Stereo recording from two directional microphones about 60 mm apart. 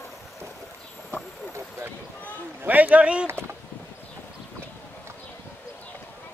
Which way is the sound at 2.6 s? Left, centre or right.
Right.